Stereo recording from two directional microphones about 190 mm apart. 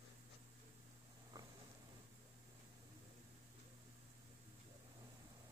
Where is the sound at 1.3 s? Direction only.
20° right (ahead or behind).